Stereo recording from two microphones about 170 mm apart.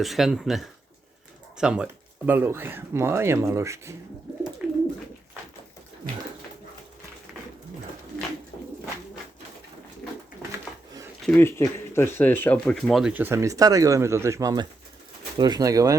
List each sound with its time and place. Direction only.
0.0 s speech: centre (ahead or behind); by 3.9 s 15° right (ahead or behind)
4.6 s bird: 10° right (ahead or behind)
11.2 s speech: 10° left (ahead or behind); by 16.0 s 20° right (ahead or behind)